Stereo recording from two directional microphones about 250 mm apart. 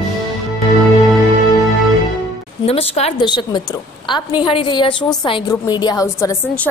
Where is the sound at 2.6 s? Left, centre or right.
Left.